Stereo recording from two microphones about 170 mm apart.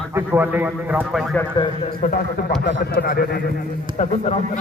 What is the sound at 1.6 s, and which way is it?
Speech, 25° left (ahead or behind).